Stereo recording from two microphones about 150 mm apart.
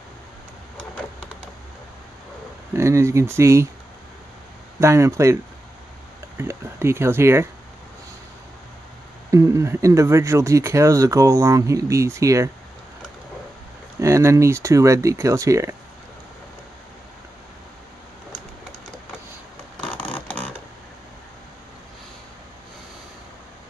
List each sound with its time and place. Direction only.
2.7 s speech: 20° right (ahead or behind)
4.7 s speech: 20° right (ahead or behind)
9.3 s speech: 20° right (ahead or behind)
13.9 s speech: 20° right (ahead or behind)
19.8 s a sound: 10° left (ahead or behind)